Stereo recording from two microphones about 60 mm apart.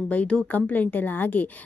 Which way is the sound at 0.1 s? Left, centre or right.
Left.